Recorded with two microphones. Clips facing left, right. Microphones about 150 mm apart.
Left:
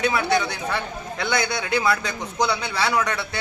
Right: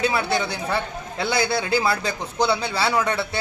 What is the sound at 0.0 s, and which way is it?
A man's voice, 30° right (ahead or behind).